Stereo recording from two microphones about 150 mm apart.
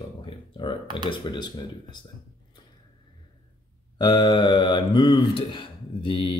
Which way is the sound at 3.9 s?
30° left (ahead or behind).